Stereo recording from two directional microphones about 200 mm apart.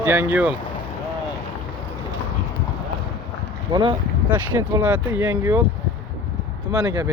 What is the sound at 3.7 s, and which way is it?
Speech, 25° right (ahead or behind).